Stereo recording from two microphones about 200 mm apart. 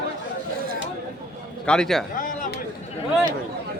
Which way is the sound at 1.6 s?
5° left (ahead or behind).